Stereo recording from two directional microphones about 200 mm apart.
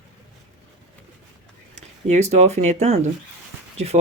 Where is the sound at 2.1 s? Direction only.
35° right (ahead or behind).